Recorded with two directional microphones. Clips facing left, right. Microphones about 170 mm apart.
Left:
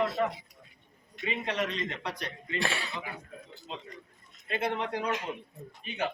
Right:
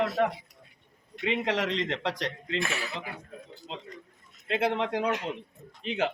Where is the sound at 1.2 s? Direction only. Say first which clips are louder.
Right 4 dB; 90° right.